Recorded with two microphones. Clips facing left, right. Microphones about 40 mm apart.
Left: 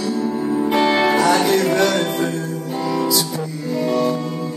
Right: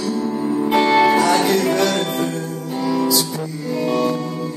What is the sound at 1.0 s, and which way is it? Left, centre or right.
Music, centre.